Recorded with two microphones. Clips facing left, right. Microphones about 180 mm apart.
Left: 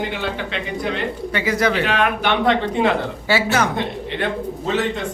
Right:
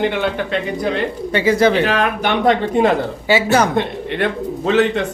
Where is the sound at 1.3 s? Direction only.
30° right (ahead or behind).